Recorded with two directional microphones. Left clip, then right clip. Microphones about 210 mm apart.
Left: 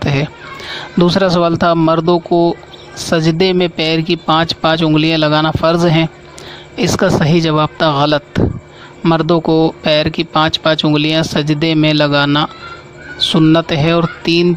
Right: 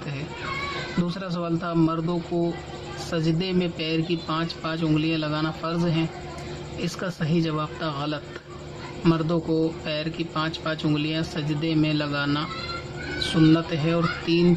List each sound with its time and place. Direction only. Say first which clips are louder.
1.0 s speech: left 19 dB; 50° left (ahead or behind)